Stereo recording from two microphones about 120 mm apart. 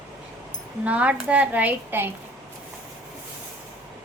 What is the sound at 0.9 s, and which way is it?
A woman's voice, 10° right (ahead or behind).